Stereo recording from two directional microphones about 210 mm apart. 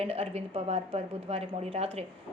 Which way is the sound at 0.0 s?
30° right (ahead or behind).